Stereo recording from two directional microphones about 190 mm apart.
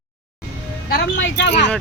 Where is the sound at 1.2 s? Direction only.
65° left (ahead or behind).